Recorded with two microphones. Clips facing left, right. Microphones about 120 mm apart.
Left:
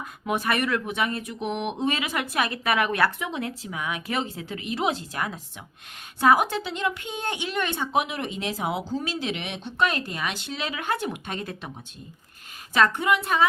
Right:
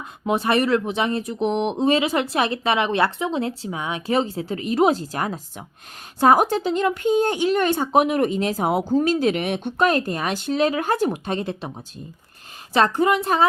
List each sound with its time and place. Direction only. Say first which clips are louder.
0.0 s speech: right 5 dB; 30° right (ahead or behind)
12.7 s speech: right 4 dB; 35° right (ahead or behind)